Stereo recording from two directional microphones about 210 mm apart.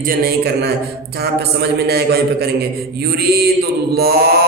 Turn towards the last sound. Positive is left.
turn(degrees=-50)  # may be behind; listen again after turning